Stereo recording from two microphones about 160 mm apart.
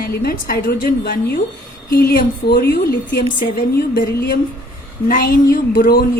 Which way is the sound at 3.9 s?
90° left.